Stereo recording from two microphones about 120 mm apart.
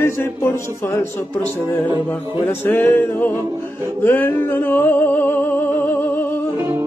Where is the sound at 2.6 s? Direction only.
15° left (ahead or behind).